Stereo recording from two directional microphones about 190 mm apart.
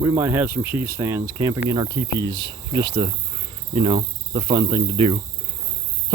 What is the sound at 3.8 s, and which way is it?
Cricket, 25° right (ahead or behind).